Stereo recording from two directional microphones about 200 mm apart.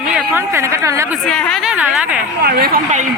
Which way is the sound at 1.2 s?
5° left (ahead or behind).